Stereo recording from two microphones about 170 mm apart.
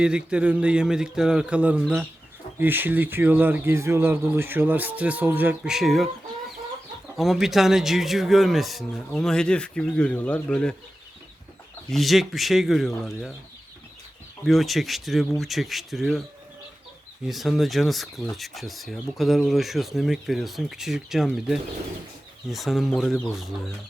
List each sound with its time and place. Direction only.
0.0 s speech: 5° right (ahead or behind)
7.2 s speech: centre (ahead or behind)
11.9 s speech: centre (ahead or behind)
14.4 s speech: centre (ahead or behind)
17.2 s speech: centre (ahead or behind)